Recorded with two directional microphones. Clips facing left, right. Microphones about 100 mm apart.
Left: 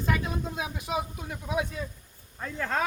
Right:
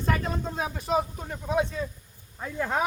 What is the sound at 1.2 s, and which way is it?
Speech, 5° left (ahead or behind).